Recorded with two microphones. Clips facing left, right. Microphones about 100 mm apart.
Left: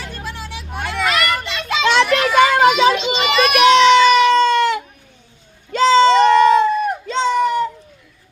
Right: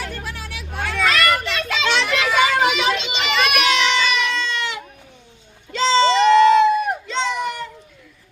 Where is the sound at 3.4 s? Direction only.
40° left (ahead or behind).